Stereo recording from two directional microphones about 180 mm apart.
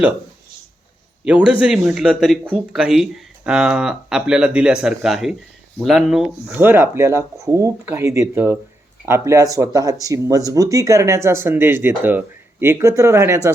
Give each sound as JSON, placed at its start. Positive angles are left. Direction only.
{"t": 1.2, "sound": "speech", "side_deg": -5}